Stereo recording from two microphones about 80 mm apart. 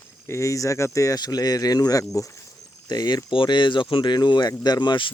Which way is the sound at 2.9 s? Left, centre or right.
Left.